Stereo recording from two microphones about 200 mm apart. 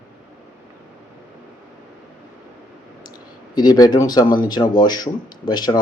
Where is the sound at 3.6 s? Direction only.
20° left (ahead or behind).